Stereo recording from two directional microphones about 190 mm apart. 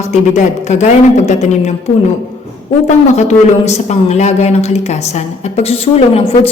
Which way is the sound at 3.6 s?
35° left (ahead or behind).